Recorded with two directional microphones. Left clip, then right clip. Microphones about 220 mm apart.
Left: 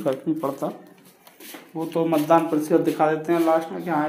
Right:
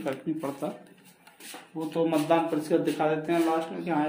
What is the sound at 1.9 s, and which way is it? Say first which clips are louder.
Speech: left 6 dB; 15° left (ahead or behind).